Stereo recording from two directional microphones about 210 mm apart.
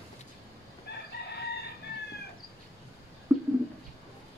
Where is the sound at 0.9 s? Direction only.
50° left (ahead or behind).